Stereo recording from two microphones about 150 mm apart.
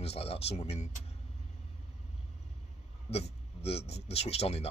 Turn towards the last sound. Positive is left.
turn(degrees=45)  # may be behind; listen again after turning